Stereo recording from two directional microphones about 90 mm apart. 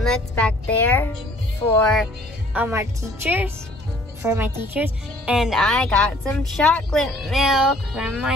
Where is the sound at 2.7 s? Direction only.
25° right (ahead or behind).